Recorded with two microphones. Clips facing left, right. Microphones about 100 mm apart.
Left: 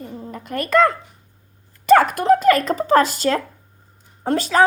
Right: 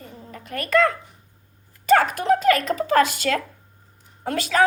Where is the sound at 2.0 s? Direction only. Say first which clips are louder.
Left 4 dB; 50° left (ahead or behind).